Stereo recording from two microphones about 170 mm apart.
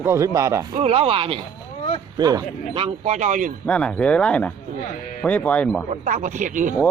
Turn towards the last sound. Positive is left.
turn(degrees=-50)  # may be behind; listen again after turning